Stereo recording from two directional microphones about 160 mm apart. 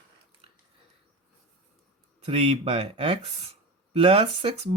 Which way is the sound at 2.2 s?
35° right (ahead or behind).